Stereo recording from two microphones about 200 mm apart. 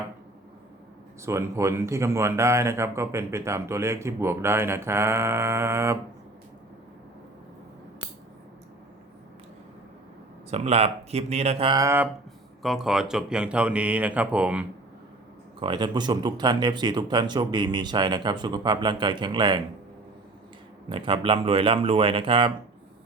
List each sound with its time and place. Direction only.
1.2 s speech: 15° right (ahead or behind)
10.5 s speech: 30° right (ahead or behind); by 12.0 s 15° right (ahead or behind)
12.6 s speech: centre (ahead or behind)
15.6 s speech: 25° right (ahead or behind)
20.9 s speech: 25° right (ahead or behind)